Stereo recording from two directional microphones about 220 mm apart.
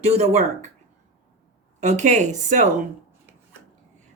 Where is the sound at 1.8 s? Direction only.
30° right (ahead or behind).